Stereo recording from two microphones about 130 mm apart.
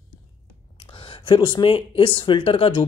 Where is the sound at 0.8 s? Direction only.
45° left (ahead or behind).